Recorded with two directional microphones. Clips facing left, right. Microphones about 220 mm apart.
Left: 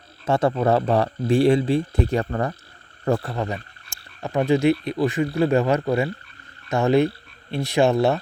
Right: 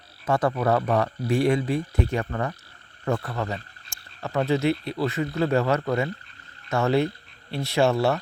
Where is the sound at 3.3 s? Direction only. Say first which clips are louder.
Left 3 dB; 15° left (ahead or behind).